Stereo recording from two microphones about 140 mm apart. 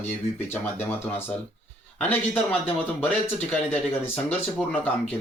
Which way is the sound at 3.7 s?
10° left (ahead or behind).